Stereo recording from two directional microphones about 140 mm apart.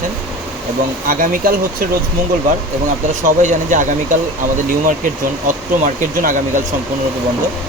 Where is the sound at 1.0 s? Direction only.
80° right.